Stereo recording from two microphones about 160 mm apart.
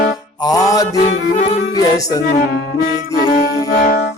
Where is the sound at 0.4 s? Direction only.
20° left (ahead or behind).